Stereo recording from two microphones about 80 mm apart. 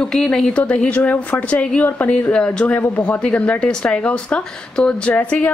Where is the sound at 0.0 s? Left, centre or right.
Centre.